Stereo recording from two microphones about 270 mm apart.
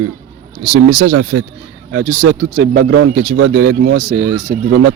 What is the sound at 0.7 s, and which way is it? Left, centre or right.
Speech, right.